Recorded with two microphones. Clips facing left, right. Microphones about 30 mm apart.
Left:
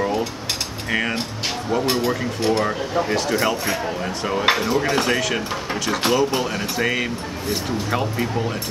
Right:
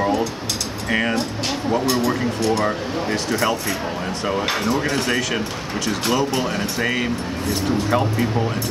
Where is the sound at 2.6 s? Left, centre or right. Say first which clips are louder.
Even; centre.